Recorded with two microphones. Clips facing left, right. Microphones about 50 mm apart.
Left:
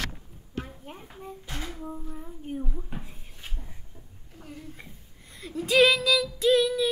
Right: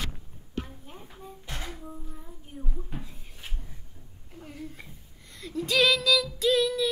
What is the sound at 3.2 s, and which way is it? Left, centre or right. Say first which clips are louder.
Cupboard open or close: even; centre.